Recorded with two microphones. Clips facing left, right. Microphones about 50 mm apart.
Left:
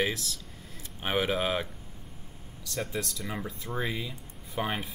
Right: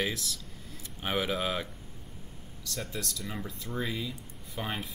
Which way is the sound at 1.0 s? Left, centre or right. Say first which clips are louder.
Left 2 dB; centre.